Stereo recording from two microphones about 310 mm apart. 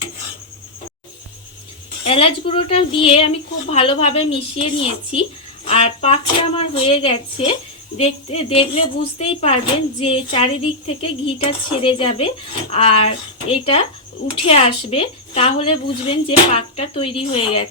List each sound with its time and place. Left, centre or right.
2.0 s a woman's voice: centre